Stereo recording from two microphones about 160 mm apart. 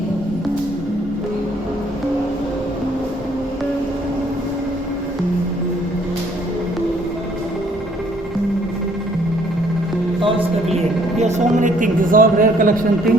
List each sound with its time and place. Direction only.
10.2 s speech: 35° right (ahead or behind); by 13.1 s 60° right (ahead or behind)